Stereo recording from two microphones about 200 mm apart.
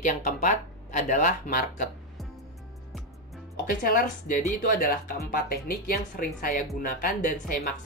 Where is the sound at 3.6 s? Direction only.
45° left (ahead or behind).